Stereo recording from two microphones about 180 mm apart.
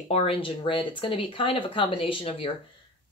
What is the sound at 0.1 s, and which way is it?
Speech, 35° left (ahead or behind).